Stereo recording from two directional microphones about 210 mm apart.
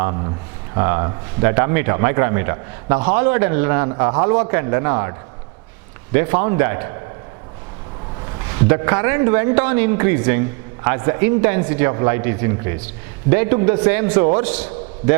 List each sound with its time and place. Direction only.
0.0 s speech: 25° right (ahead or behind)
6.1 s speech: 10° right (ahead or behind)
8.5 s speech: 15° right (ahead or behind)